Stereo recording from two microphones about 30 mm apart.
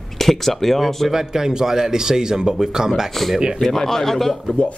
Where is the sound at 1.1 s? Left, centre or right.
Centre.